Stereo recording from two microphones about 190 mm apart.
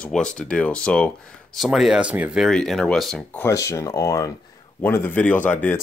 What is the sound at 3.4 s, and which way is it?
Speech, 15° left (ahead or behind).